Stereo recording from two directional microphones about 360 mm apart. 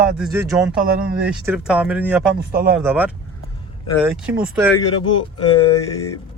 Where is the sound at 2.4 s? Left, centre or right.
Right.